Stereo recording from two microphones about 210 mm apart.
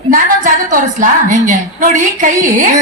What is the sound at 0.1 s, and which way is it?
A woman's voice, 40° right (ahead or behind).